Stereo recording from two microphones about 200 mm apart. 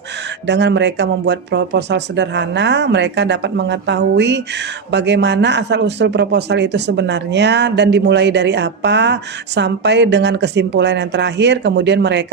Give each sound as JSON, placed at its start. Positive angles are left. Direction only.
{"t": 0.4, "sound": "speech", "side_deg": -60}